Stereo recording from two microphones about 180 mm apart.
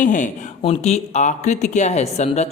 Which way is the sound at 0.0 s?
45° left (ahead or behind).